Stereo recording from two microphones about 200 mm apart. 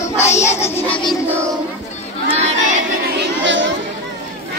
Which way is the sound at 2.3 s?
35° right (ahead or behind).